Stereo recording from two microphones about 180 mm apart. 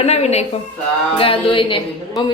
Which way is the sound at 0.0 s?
35° left (ahead or behind).